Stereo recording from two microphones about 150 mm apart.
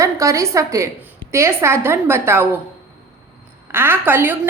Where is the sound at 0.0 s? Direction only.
20° right (ahead or behind).